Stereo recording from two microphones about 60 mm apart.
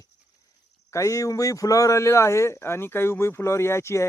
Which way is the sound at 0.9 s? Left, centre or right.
Left.